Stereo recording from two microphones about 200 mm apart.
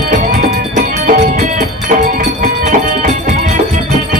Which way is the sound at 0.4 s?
40° right (ahead or behind).